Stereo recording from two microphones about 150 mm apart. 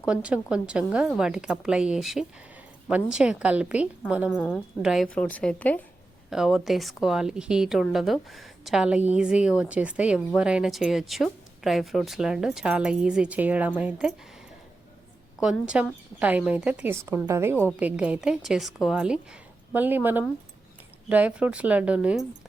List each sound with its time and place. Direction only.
0.0 s a woman's voice: 5° right (ahead or behind)
4.4 s a woman's voice: 5° left (ahead or behind)
4.8 s a woman's voice: 5° right (ahead or behind)
5.0 s a woman's voice: 10° left (ahead or behind)
6.3 s a woman's voice: 5° right (ahead or behind)
15.4 s a woman's voice: 5° right (ahead or behind)